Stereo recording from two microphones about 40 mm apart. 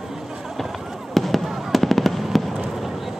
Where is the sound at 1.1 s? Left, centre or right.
Centre.